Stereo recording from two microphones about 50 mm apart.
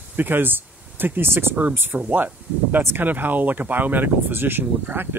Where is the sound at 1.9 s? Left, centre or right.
Right.